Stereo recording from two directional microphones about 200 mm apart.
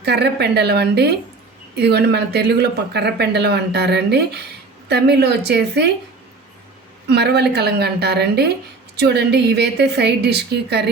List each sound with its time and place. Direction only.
0.0 s speech: 55° right (ahead or behind)
7.1 s speech: 55° right (ahead or behind)